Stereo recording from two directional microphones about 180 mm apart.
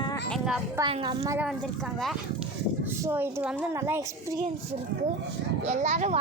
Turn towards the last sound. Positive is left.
turn(degrees=-40)  # may be behind; listen again after turning